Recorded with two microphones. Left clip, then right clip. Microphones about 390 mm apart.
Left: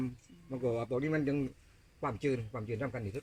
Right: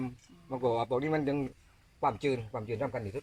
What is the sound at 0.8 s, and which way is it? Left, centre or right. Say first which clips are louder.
Speech: right 3 dB; centre.